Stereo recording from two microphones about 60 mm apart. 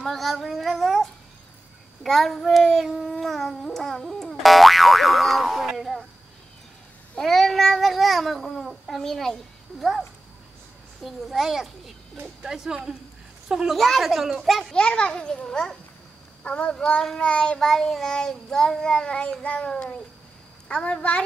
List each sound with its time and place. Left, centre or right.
0.1 s a child's voice: centre
7.2 s a child's voice: centre
11.1 s a child's voice: centre
13.7 s a child's voice: centre
14.7 s child singing: centre
17.3 s a woman's voice: centre
17.6 s child singing: centre
19.4 s a woman's voice: left
19.7 s child singing: centre
20.6 s a woman's voice: centre